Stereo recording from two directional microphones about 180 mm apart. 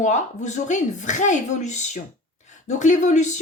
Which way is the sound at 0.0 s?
40° left (ahead or behind).